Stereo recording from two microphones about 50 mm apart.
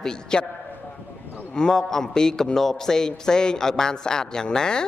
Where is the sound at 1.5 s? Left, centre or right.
Centre.